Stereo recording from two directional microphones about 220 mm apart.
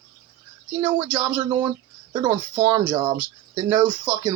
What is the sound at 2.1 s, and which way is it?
Speech, 20° right (ahead or behind).